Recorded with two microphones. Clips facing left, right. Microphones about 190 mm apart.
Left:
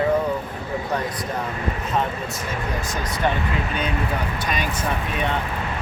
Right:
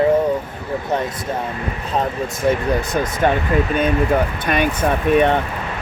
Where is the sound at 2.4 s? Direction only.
60° right (ahead or behind).